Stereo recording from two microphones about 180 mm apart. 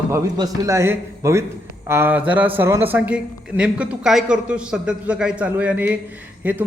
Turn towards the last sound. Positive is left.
turn(degrees=-10)  # may be behind; listen again after turning